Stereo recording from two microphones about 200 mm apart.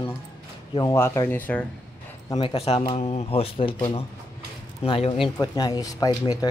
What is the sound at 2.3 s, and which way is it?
Speech, 25° left (ahead or behind).